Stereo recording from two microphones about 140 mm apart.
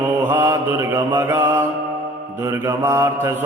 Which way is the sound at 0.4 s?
20° right (ahead or behind).